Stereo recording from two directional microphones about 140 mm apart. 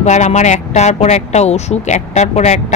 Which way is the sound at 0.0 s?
55° left (ahead or behind).